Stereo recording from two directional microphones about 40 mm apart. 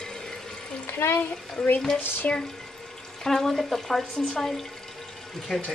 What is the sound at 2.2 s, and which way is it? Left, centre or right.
Speech, left.